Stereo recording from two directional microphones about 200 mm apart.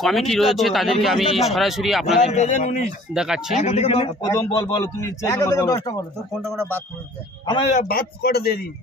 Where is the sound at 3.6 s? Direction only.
30° left (ahead or behind).